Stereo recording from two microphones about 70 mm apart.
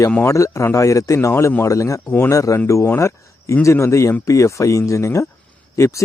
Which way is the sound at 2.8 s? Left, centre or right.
Left.